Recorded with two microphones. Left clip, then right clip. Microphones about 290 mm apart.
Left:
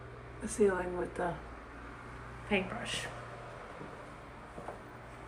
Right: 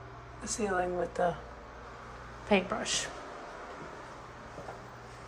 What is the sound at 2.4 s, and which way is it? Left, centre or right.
Speech, centre.